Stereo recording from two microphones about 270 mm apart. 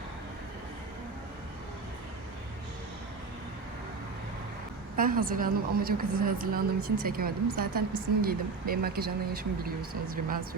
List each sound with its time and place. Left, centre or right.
4.9 s a woman's voice: right